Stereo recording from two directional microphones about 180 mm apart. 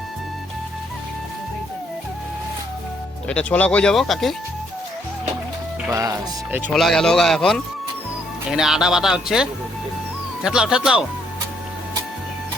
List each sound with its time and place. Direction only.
3.2 s speech: 5° left (ahead or behind)
5.9 s speech: 15° right (ahead or behind)
6.7 s speech: centre (ahead or behind)